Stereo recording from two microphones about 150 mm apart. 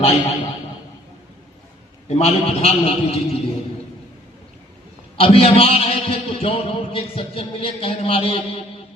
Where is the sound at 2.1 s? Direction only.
45° left (ahead or behind).